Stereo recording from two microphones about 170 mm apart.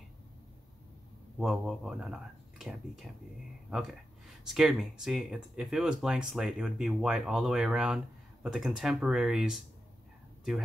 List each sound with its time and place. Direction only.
1.4 s speech: centre (ahead or behind)
4.5 s speech: centre (ahead or behind)